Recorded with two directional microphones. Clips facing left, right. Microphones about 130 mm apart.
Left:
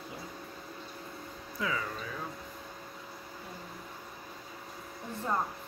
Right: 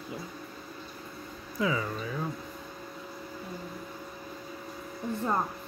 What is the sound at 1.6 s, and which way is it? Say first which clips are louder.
Speech: right 5 dB; 15° right (ahead or behind).